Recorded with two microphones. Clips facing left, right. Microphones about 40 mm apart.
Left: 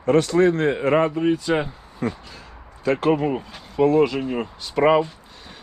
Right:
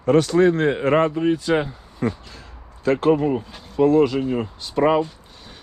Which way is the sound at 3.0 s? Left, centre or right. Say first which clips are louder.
Right 2 dB; left.